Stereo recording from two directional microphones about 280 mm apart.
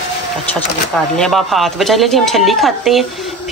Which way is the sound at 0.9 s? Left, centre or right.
Centre.